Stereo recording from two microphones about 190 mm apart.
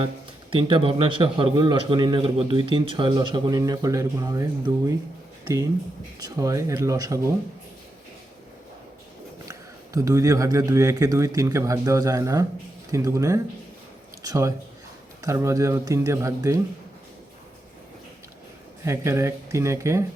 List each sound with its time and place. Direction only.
0.5 s a man's voice: 30° right (ahead or behind)
6.1 s a man's voice: 20° right (ahead or behind)
9.5 s a man's voice: 15° right (ahead or behind)
18.9 s a man's voice: 15° right (ahead or behind)